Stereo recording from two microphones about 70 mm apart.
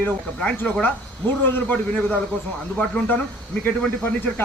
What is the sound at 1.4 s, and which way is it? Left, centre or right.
A man's voice, left.